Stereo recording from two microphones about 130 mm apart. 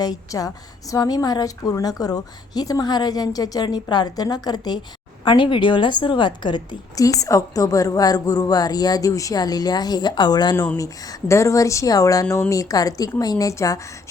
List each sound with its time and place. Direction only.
0.0 s a woman's voice: 30° left (ahead or behind)